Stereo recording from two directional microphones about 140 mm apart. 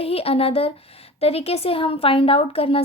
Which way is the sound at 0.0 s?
45° left (ahead or behind).